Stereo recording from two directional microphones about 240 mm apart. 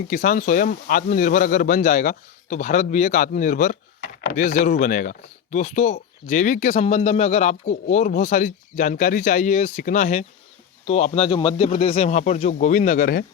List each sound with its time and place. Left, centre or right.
0.1 s speech: left